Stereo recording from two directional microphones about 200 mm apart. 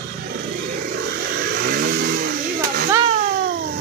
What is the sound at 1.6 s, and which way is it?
Vehicle, 50° right (ahead or behind).